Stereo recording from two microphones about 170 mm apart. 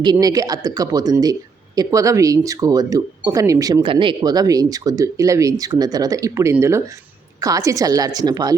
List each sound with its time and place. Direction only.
0.0 s speech: 25° right (ahead or behind)